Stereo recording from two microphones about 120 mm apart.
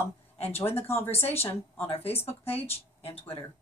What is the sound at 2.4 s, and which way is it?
Speech, 55° left (ahead or behind).